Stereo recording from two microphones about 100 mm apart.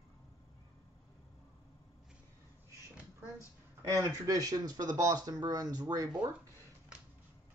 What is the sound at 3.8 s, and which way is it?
Speech, 35° right (ahead or behind).